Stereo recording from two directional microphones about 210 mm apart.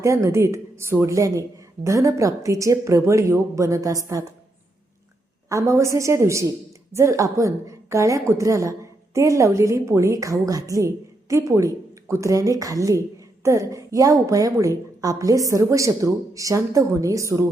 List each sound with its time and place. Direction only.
0.0 s a woman's voice: 15° right (ahead or behind)
5.5 s a woman's voice: 15° right (ahead or behind)